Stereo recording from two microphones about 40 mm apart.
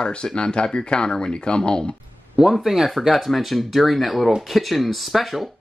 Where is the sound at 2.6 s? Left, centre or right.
Centre.